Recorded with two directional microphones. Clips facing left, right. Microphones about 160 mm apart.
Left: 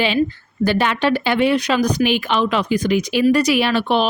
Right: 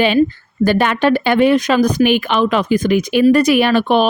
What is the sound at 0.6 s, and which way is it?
Speech, 50° right (ahead or behind).